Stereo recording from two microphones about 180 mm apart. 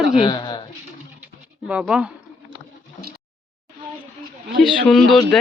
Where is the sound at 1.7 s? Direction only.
5° right (ahead or behind).